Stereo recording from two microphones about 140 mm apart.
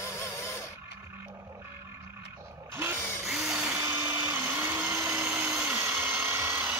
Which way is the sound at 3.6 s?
20° right (ahead or behind).